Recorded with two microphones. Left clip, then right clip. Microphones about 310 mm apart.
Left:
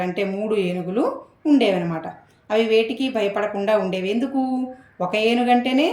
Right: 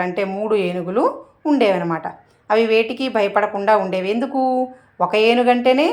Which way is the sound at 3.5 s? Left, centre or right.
Centre.